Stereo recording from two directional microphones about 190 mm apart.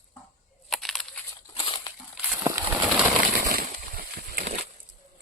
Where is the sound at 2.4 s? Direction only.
15° right (ahead or behind).